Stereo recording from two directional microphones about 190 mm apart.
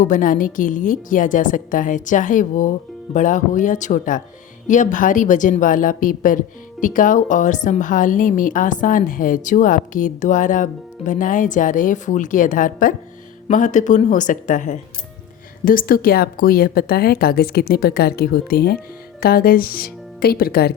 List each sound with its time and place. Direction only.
0.0 s a woman's voice: 45° left (ahead or behind)